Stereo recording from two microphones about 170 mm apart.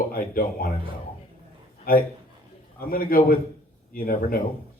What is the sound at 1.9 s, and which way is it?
A man's voice, 60° left (ahead or behind).